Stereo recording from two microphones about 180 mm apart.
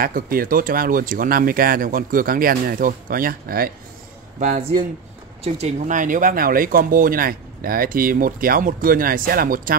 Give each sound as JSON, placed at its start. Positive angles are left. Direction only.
{"t": 0.0, "sound": "speech", "side_deg": -55}
{"t": 4.4, "sound": "speech", "side_deg": -40}